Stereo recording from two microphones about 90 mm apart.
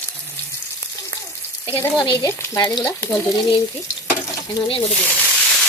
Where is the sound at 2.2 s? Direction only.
40° left (ahead or behind).